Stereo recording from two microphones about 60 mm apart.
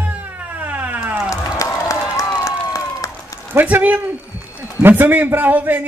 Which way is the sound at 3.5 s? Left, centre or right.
Right.